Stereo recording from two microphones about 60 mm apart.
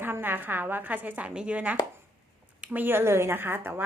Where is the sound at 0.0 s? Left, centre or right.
Right.